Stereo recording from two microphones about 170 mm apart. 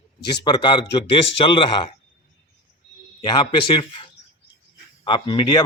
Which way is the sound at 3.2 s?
30° left (ahead or behind).